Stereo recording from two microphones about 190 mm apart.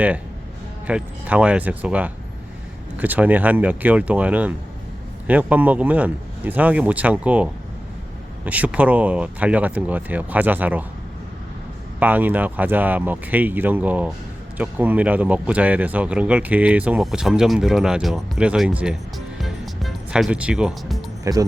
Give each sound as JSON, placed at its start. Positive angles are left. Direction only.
{"t": 0.9, "sound": "speech", "side_deg": -5}
{"t": 11.9, "sound": "speech", "side_deg": -10}
{"t": 19.4, "sound": "music", "side_deg": 0}
{"t": 21.3, "sound": "speech", "side_deg": -15}